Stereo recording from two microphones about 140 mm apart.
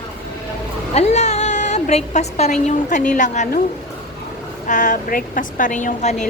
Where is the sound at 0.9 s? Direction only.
55° left (ahead or behind).